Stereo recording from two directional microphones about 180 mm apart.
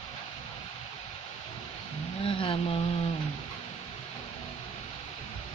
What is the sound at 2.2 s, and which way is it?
Vehicle, 30° left (ahead or behind).